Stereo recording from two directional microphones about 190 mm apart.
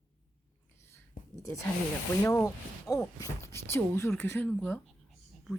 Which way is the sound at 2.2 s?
15° left (ahead or behind).